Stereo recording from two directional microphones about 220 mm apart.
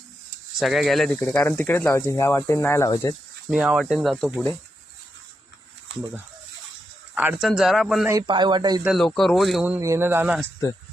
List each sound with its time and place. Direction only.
0.6 s speech: centre (ahead or behind)
3.5 s speech: 5° right (ahead or behind)
7.2 s speech: 5° right (ahead or behind)
8.1 s speech: 20° right (ahead or behind)
8.9 s speech: centre (ahead or behind)